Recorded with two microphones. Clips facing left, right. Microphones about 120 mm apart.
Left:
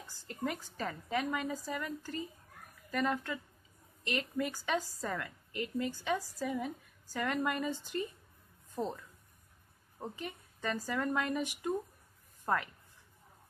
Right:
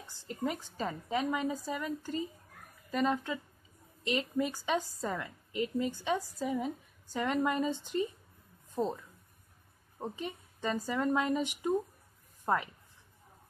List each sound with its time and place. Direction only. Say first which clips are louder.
0.3 s a woman's voice: right 2 dB; 20° right (ahead or behind)